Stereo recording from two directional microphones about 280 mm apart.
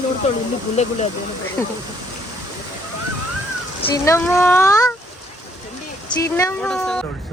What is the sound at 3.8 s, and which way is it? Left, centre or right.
Speech, centre.